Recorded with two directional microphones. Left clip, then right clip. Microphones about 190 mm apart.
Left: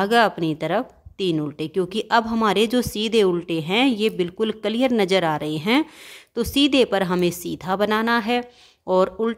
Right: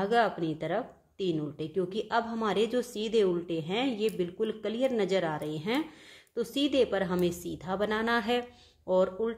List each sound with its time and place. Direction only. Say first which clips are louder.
0.0 s speech: left 9 dB; 45° left (ahead or behind)
8.8 s speech: left 7 dB; 45° left (ahead or behind)